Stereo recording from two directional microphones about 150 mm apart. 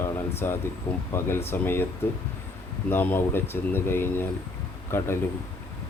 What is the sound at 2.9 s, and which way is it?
Speech, 15° left (ahead or behind).